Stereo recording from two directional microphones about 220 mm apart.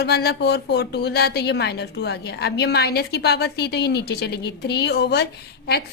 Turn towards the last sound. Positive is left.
turn(degrees=50)  # may be behind; listen again after turning